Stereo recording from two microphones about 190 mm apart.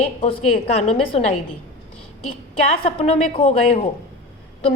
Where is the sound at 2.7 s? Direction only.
30° left (ahead or behind).